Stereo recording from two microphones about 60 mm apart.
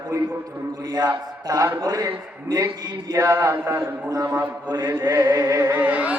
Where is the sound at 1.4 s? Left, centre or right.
Right.